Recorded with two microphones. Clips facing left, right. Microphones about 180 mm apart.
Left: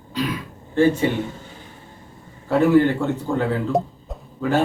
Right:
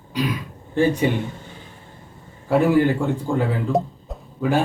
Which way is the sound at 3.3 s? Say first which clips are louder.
Right 1 dB; 10° right (ahead or behind).